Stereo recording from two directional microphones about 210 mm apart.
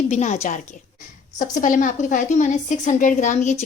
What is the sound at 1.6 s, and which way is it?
A woman's voice, 35° left (ahead or behind).